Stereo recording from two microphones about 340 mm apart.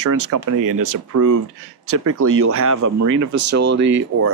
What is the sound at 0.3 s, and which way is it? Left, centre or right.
Speech, right.